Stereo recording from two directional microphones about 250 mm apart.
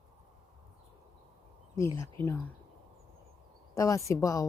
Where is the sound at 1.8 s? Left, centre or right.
Centre.